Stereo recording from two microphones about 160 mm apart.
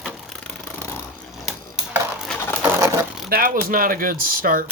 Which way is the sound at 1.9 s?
Centre (ahead or behind).